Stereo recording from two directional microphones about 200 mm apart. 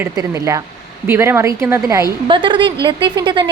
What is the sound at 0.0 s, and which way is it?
A woman's voice, 15° right (ahead or behind).